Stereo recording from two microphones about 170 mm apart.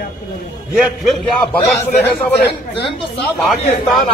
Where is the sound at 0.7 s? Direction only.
Centre (ahead or behind).